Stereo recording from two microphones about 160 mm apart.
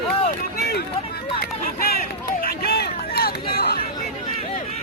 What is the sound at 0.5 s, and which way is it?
Run, 80° left.